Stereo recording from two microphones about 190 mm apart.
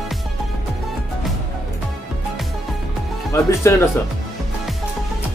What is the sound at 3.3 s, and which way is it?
Speech, 15° left (ahead or behind).